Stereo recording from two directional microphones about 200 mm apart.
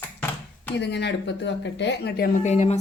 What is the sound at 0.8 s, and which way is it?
Speech, 60° left (ahead or behind).